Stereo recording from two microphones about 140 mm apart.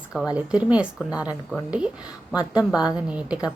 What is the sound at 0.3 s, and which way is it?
A woman's voice, 10° right (ahead or behind).